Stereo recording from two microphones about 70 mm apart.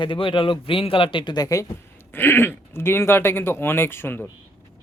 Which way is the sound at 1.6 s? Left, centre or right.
Left.